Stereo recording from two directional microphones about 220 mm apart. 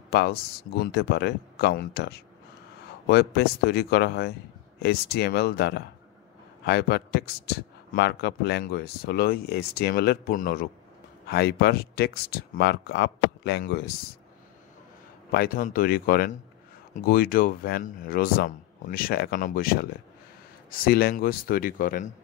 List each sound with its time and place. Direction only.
0.1 s speech: 45° left (ahead or behind)
15.3 s speech: 40° left (ahead or behind)